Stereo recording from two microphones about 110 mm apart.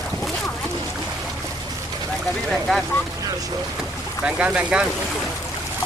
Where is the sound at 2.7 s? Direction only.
Centre (ahead or behind).